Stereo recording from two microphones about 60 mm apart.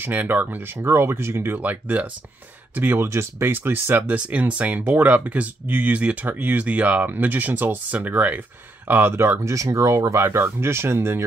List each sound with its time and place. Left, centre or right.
0.0 s speech: right
0.7 s speech: right
1.6 s speech: right
3.0 s speech: right
3.4 s speech: right
10.2 s speech: right